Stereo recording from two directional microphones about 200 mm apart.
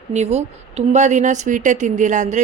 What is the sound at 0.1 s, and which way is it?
A woman's voice, 35° right (ahead or behind).